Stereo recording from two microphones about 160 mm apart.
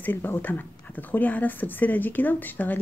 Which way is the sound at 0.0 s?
10° left (ahead or behind).